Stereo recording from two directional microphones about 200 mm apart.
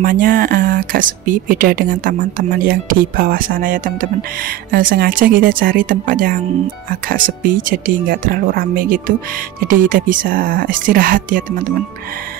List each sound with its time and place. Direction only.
0.0 s speech: 45° right (ahead or behind)